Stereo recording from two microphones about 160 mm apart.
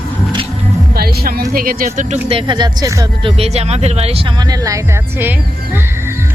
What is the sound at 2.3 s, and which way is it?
Speech, 30° right (ahead or behind).